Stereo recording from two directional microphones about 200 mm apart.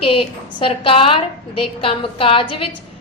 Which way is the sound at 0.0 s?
25° left (ahead or behind).